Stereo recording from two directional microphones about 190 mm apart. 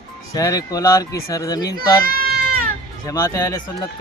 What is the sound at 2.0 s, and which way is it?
Goat, 50° right (ahead or behind).